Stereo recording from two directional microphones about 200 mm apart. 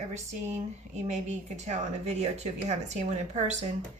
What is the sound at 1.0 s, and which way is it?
Speech, 35° right (ahead or behind).